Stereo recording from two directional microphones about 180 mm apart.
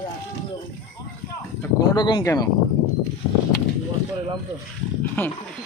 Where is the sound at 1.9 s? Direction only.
25° left (ahead or behind).